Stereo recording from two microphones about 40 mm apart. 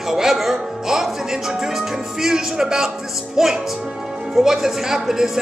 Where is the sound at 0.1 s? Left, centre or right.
Centre.